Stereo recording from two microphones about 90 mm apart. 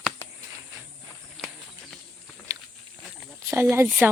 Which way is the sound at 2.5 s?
40° right (ahead or behind).